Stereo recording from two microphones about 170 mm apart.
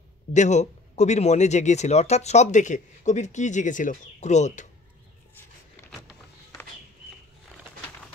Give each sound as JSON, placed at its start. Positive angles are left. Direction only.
{"t": 0.3, "sound": "a man's voice", "side_deg": 45}